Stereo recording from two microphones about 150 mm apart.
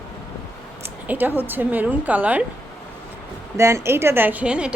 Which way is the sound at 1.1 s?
10° right (ahead or behind).